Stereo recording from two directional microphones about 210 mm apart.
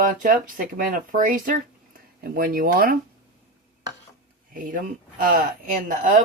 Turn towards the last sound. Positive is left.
turn(degrees=-40)  # may be behind; listen again after turning